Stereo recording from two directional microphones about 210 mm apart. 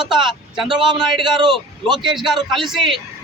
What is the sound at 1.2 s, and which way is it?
Speech, 20° right (ahead or behind).